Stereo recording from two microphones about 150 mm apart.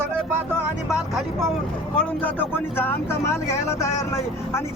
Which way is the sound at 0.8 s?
5° right (ahead or behind).